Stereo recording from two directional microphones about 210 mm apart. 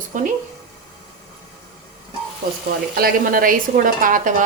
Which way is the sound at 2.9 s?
45° right (ahead or behind).